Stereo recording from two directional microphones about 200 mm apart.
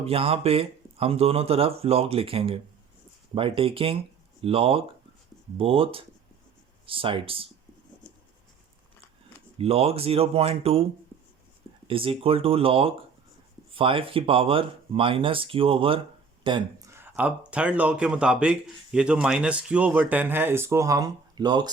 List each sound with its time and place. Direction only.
0.0 s speech: 30° right (ahead or behind)
9.6 s speech: 30° right (ahead or behind)
11.9 s speech: 25° right (ahead or behind)
16.9 s speech: 10° right (ahead or behind)